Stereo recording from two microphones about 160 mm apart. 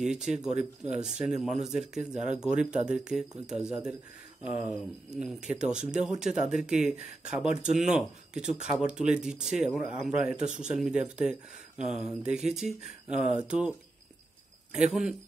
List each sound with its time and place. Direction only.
0.0 s speech: 5° right (ahead or behind)
5.5 s speech: 5° right (ahead or behind)
10.4 s speech: 50° right (ahead or behind)
10.8 s speech: 5° right (ahead or behind)